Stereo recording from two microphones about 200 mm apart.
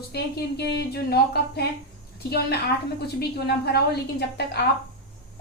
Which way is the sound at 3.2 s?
55° left (ahead or behind).